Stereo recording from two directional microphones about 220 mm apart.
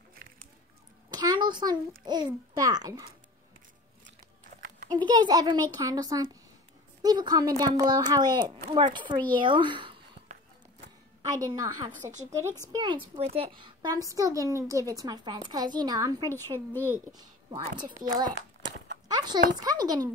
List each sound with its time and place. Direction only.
1.1 s a child's voice: 20° right (ahead or behind)
4.6 s a sound: 40° right (ahead or behind)
4.8 s a woman's voice: 20° right (ahead or behind)
11.2 s a woman's voice: 15° right (ahead or behind)
16.5 s speech: 10° left (ahead or behind)
17.2 s a woman's voice: 20° right (ahead or behind)
19.0 s a sound: 20° right (ahead or behind)
19.5 s a woman's voice: 15° right (ahead or behind)